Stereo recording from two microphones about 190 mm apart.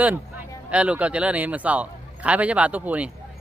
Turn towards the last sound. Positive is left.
turn(degrees=-10)  # may be behind; listen again after turning